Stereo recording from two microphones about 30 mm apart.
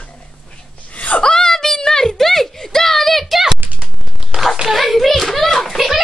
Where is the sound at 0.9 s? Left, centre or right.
Left.